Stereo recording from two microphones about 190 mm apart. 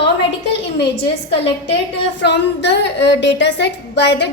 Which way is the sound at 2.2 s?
65° left (ahead or behind).